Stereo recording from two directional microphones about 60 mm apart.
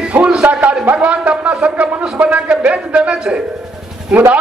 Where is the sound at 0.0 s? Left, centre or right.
Centre.